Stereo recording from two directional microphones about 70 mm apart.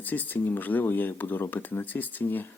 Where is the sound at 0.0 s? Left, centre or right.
Left.